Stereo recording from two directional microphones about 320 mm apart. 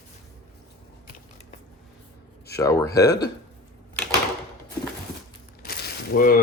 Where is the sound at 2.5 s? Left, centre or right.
Centre.